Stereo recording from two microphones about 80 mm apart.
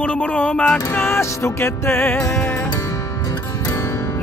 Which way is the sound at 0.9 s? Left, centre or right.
Left.